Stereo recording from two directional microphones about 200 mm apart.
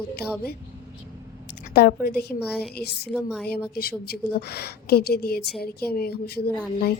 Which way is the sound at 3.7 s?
50° left (ahead or behind).